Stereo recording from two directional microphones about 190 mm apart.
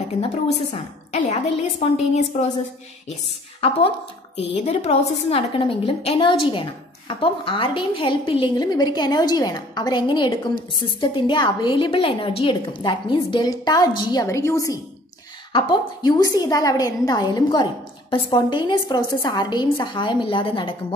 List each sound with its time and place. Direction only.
1.1 s a woman's voice: 35° left (ahead or behind)
3.6 s a woman's voice: 30° left (ahead or behind)